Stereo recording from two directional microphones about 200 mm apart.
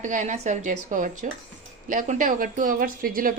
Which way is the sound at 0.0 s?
35° right (ahead or behind).